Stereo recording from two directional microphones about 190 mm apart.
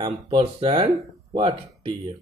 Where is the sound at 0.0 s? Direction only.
30° right (ahead or behind).